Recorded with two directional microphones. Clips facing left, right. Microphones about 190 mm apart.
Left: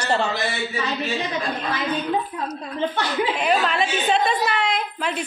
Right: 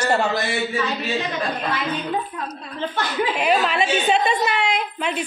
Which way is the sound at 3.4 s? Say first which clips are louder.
Right 3 dB; 5° right (ahead or behind).